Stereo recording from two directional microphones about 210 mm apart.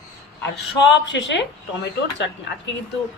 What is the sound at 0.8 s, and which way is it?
A woman's voice, 60° left (ahead or behind).